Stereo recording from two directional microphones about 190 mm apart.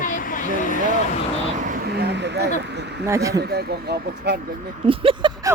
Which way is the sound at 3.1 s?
15° right (ahead or behind).